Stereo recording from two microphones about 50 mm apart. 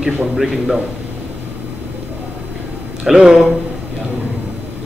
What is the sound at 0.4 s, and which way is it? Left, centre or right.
Speech, centre.